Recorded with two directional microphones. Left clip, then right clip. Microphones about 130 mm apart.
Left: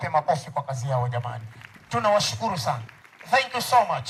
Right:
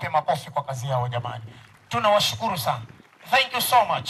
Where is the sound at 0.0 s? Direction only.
20° right (ahead or behind).